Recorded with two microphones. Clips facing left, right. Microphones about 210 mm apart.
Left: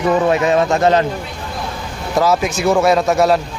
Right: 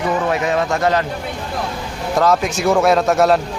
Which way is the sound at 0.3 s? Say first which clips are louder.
Left 4 dB; 25° left (ahead or behind).